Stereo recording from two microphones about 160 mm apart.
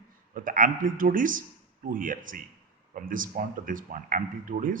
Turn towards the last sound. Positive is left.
turn(degrees=-60)  # may be behind; listen again after turning